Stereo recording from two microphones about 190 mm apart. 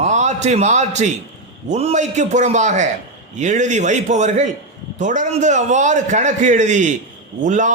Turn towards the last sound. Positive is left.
turn(degrees=-40)  # may be behind; listen again after turning